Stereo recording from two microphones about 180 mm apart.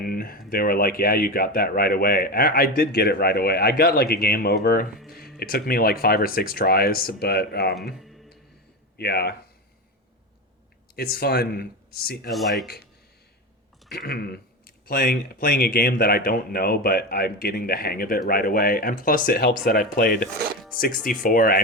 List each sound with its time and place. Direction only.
0.0 s speech: 55° left (ahead or behind)
9.0 s speech: 65° left (ahead or behind)
10.9 s speech: 60° left (ahead or behind)
12.3 s speech: centre (ahead or behind)
12.6 s speech: 60° left (ahead or behind)
13.9 s speech: 60° left (ahead or behind)
21.1 s speech: 50° left (ahead or behind)